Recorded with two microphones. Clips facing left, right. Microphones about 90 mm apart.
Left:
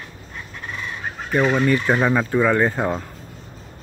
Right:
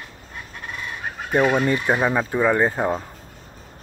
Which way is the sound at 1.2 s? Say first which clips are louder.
Even; 10° right (ahead or behind).